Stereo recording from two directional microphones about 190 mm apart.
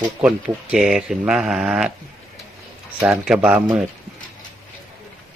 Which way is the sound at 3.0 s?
10° right (ahead or behind).